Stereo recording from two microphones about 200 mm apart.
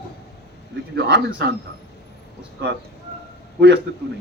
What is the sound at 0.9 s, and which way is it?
Speech, 60° right (ahead or behind).